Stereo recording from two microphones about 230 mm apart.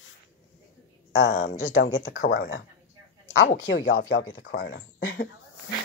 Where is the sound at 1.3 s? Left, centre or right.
Left.